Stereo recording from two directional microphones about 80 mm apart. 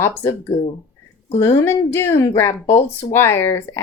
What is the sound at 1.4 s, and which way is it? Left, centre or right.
A woman's voice, left.